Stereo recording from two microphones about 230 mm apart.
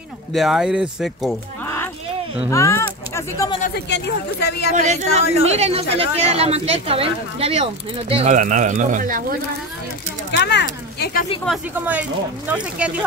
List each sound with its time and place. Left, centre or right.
0.3 s speech: centre
2.5 s speech: centre
3.6 s speech: left
4.7 s speech: right
10.3 s speech: left
11.4 s speech: centre